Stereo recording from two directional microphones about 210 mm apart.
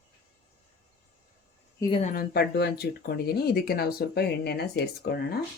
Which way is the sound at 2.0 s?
45° left (ahead or behind).